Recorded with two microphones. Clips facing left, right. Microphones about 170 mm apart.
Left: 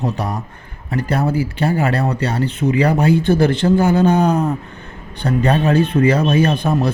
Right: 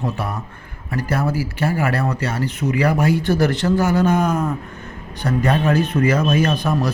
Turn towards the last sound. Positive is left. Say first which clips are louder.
# left 3 dB
turn(degrees=25)  # may be behind; listen again after turning